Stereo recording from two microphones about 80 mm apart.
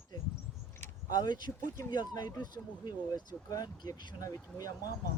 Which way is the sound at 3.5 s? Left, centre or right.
Left.